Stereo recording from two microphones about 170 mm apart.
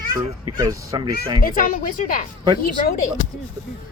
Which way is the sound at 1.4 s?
55° left (ahead or behind).